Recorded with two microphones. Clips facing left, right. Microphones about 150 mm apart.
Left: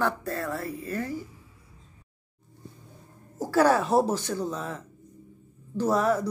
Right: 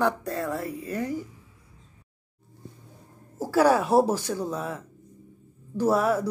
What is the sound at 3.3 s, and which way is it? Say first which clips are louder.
Speech: right 1 dB; 10° right (ahead or behind).